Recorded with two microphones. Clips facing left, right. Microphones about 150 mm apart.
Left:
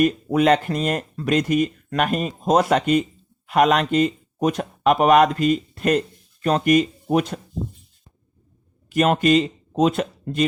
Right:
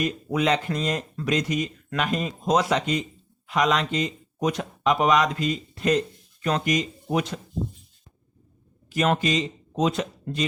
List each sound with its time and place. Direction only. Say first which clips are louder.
0.3 s speech: left 5 dB; 55° left (ahead or behind)
8.9 s speech: left 6 dB; 55° left (ahead or behind)